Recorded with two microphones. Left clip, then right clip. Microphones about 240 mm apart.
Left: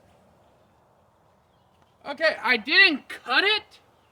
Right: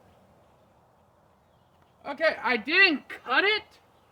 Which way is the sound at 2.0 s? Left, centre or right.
Centre.